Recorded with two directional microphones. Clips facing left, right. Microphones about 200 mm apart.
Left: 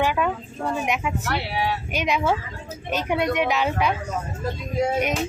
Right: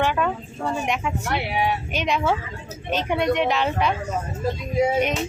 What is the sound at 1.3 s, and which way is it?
Speech, 15° right (ahead or behind).